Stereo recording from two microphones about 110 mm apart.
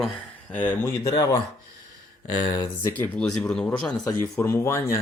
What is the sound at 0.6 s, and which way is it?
Speech, 20° left (ahead or behind).